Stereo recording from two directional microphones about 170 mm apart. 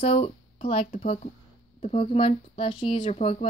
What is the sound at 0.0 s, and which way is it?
A woman's voice, 35° left (ahead or behind).